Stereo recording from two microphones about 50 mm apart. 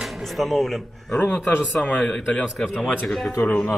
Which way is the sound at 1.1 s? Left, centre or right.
Left.